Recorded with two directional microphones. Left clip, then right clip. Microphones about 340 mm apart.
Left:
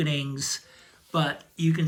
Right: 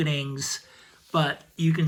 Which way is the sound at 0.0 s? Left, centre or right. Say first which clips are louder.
Even; centre.